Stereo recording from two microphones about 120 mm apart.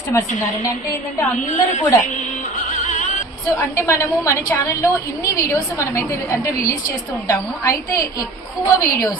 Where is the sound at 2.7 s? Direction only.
90° left.